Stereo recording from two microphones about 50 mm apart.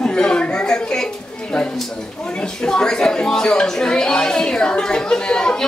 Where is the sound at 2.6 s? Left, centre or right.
Centre.